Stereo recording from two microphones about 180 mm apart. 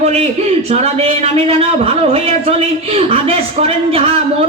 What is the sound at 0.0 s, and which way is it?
A man's voice, 35° right (ahead or behind).